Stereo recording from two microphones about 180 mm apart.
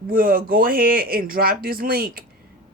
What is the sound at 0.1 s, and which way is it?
Speech, 55° right (ahead or behind).